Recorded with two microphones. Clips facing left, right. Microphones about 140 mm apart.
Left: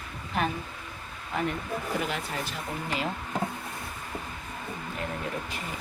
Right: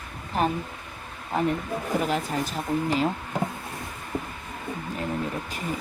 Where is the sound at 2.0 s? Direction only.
40° right (ahead or behind).